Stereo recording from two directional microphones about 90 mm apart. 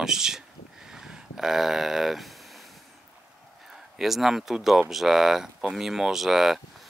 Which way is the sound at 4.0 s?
5° right (ahead or behind).